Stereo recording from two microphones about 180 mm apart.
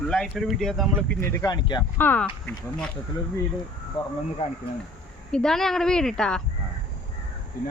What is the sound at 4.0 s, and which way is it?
Speech, 25° left (ahead or behind).